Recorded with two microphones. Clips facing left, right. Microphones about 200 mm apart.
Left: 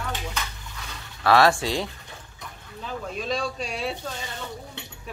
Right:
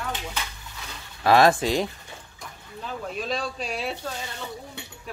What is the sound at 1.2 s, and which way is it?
Speech, 20° right (ahead or behind).